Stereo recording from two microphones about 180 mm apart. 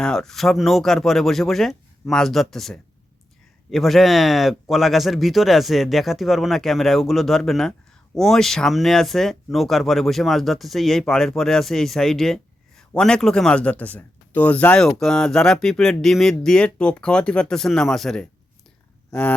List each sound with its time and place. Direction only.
0.0 s speech: 5° left (ahead or behind)